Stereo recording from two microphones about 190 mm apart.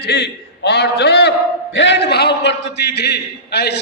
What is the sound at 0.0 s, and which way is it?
A man's voice, 60° left (ahead or behind).